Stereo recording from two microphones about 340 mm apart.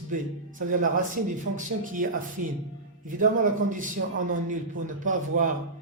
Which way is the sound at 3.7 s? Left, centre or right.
Right.